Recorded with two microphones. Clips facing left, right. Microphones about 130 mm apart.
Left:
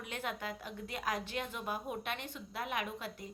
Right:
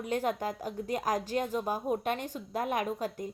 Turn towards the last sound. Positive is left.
turn(degrees=-40)  # may be behind; listen again after turning